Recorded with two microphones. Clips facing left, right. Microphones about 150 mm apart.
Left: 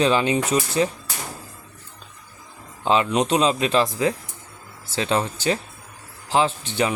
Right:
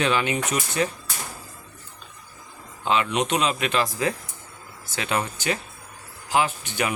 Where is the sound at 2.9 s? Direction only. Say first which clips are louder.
Left 3 dB; 35° left (ahead or behind).